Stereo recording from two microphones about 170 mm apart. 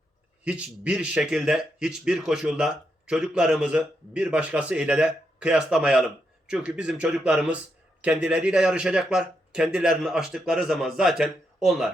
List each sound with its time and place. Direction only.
0.4 s speech: 5° right (ahead or behind)